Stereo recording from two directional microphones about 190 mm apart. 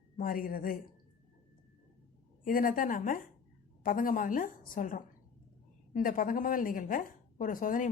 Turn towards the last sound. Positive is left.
turn(degrees=45)  # may be behind; listen again after turning